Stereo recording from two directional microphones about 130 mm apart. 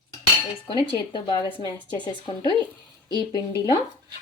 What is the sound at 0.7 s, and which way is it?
Speech, 35° left (ahead or behind).